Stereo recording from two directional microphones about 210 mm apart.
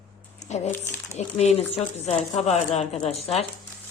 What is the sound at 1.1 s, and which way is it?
Speech, 30° left (ahead or behind).